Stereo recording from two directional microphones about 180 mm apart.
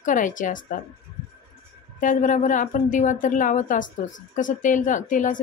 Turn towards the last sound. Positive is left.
turn(degrees=45)  # may be behind; listen again after turning